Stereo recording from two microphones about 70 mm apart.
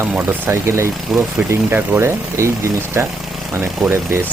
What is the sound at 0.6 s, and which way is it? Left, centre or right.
Speech, right.